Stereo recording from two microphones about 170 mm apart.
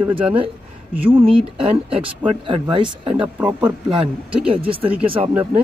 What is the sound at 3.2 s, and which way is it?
Speech, 10° right (ahead or behind).